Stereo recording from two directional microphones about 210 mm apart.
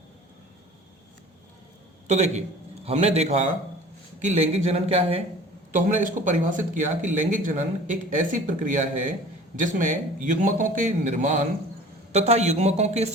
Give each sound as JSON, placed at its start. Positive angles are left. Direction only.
{"t": 2.0, "sound": "speech", "side_deg": -30}